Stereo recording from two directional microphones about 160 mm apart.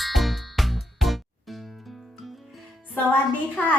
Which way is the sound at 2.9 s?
10° left (ahead or behind).